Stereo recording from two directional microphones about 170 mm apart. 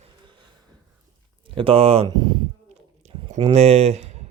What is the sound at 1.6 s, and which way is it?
Speech, 35° right (ahead or behind).